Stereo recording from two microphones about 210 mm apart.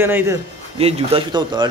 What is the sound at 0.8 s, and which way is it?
Speech, 30° right (ahead or behind).